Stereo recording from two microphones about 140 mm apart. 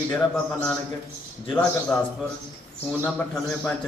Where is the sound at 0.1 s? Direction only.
5° left (ahead or behind).